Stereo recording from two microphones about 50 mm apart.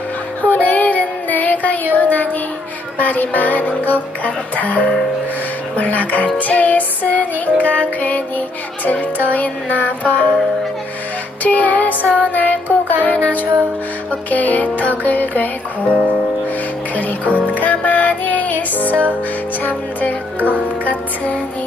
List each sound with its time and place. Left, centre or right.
0.4 s child singing: left
2.0 s music: left
11.4 s music: left
16.9 s music: left
18.9 s music: right
19.6 s music: left